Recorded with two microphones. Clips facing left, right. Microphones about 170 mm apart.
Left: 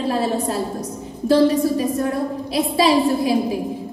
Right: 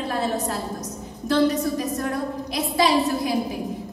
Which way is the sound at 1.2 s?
30° left (ahead or behind).